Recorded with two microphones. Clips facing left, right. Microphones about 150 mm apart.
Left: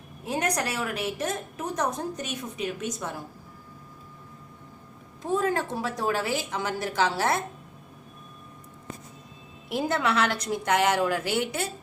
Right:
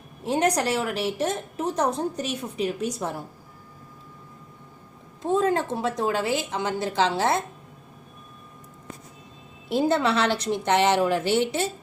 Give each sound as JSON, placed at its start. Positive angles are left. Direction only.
{"t": 0.3, "sound": "a woman's voice", "side_deg": -30}
{"t": 5.2, "sound": "a woman's voice", "side_deg": -25}
{"t": 9.6, "sound": "a woman's voice", "side_deg": -30}